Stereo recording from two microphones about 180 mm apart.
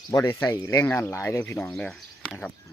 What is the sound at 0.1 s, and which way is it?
Speech, 15° left (ahead or behind).